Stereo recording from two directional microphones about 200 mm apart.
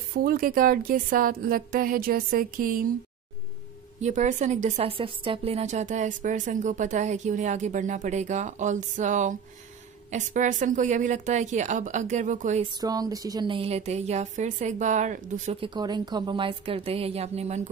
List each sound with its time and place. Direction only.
0.2 s a woman's voice: 45° right (ahead or behind)
4.0 s speech: 35° right (ahead or behind)
12.8 s speech: 20° right (ahead or behind); by 15.7 s 35° right (ahead or behind)
15.7 s speech: 20° right (ahead or behind)